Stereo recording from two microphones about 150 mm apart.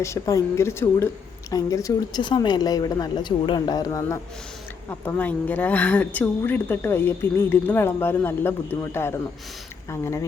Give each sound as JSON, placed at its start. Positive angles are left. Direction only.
{"t": 0.0, "sound": "a woman's voice", "side_deg": 20}
{"t": 4.9, "sound": "a woman's voice", "side_deg": 10}